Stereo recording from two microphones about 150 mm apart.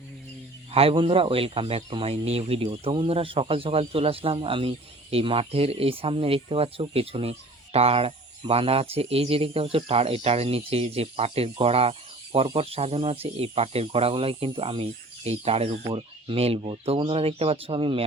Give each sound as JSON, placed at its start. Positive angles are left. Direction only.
{"t": 0.7, "sound": "speech", "side_deg": -40}